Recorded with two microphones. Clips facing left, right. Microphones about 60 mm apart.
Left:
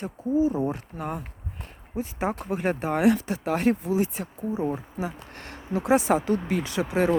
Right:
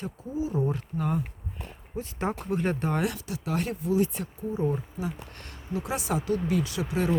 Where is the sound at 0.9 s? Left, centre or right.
Left.